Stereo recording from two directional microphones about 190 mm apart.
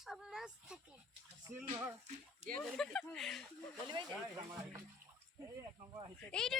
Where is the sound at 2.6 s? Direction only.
5° left (ahead or behind).